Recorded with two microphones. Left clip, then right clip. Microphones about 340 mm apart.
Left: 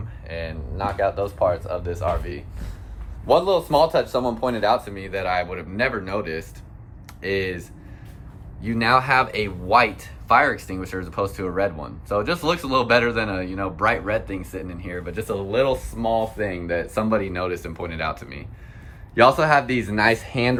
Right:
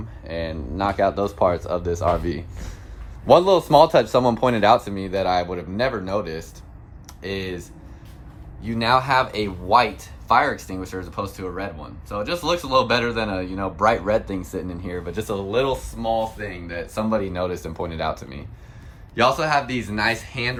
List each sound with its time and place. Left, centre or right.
0.3 s speech: centre
8.6 s speech: centre